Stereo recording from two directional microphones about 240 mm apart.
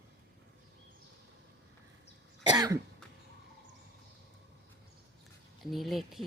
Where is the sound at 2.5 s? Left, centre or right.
Centre.